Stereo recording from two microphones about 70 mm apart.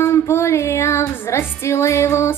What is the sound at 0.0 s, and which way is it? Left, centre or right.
Music, left.